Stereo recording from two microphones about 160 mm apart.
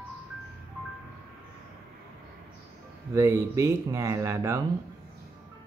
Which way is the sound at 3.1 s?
15° right (ahead or behind).